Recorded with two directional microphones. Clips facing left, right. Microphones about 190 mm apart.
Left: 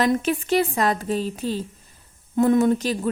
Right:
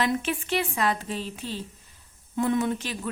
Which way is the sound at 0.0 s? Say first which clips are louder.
Left 6 dB; 40° left (ahead or behind).